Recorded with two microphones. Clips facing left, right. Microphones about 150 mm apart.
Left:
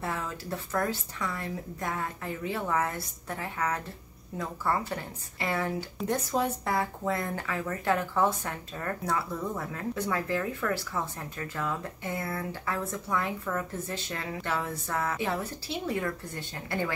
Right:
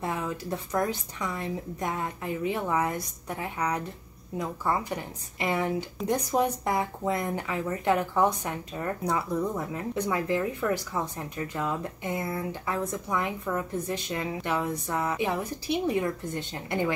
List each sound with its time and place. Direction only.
0.0 s speech: 20° right (ahead or behind)